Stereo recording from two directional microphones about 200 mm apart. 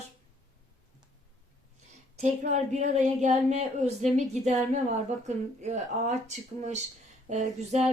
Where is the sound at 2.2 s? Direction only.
35° right (ahead or behind).